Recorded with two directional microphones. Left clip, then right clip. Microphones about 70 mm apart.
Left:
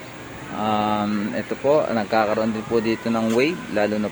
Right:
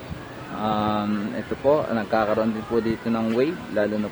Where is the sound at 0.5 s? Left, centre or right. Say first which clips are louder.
Left 3 dB; left.